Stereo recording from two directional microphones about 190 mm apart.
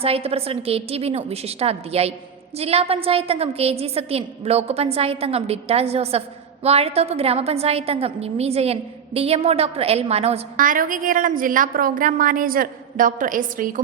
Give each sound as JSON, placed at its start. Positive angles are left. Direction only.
{"t": 0.0, "sound": "a woman's voice", "side_deg": -30}